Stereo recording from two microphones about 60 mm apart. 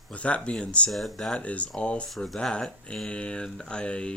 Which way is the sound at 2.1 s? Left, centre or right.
Centre.